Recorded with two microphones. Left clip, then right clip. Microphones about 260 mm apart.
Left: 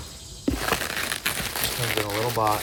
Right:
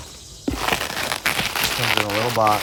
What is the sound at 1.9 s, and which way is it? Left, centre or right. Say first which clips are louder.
Speech: right 5 dB; right.